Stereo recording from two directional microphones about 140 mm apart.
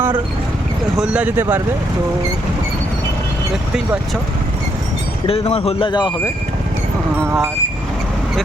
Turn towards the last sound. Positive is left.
turn(degrees=-20)  # may be behind; listen again after turning